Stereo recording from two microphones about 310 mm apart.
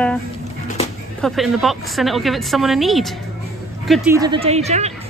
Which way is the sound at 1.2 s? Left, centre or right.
Centre.